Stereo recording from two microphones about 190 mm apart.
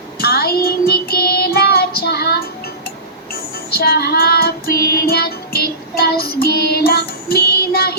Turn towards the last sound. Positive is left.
turn(degrees=55)  # may be behind; listen again after turning